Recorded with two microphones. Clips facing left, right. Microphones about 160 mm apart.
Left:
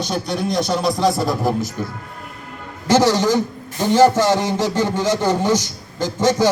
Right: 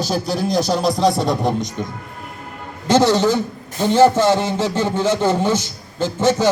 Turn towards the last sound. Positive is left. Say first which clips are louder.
# even
turn(degrees=10)  # may be behind; listen again after turning